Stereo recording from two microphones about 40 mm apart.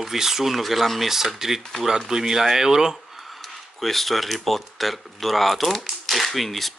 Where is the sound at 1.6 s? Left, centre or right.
Centre.